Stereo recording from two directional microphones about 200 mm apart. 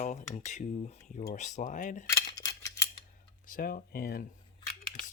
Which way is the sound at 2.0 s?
15° left (ahead or behind).